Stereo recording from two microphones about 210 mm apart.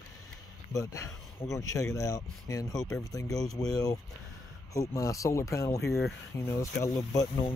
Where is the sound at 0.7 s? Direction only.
15° left (ahead or behind).